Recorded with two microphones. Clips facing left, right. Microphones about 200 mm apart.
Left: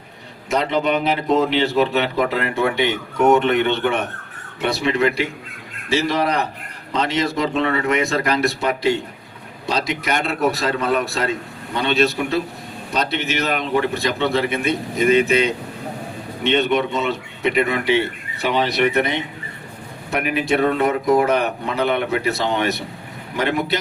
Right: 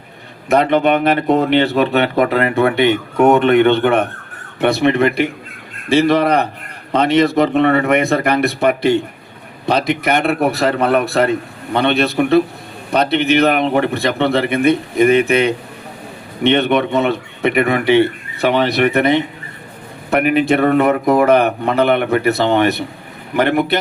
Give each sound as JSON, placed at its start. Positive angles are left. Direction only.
{"t": 0.5, "sound": "a man's voice", "side_deg": -60}